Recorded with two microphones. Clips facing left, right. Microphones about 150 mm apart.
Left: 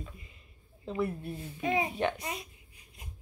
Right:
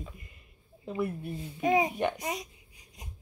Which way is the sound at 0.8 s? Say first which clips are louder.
Even; 10° right (ahead or behind).